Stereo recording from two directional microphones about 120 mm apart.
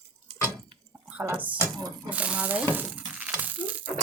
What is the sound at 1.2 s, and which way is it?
Speech, 15° right (ahead or behind).